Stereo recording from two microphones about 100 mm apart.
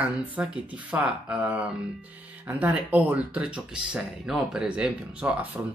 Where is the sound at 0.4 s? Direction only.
20° right (ahead or behind).